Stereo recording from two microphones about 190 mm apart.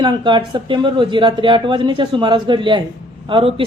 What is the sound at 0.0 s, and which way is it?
Speech, 25° right (ahead or behind).